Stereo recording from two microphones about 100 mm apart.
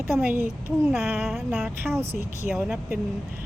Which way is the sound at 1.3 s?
5° right (ahead or behind).